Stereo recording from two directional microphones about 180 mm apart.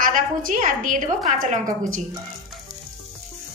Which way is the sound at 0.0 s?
50° right (ahead or behind).